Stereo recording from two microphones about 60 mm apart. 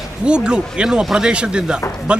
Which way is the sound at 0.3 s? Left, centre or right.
Centre.